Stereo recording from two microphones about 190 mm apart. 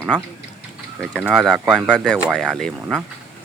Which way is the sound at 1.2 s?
5° right (ahead or behind).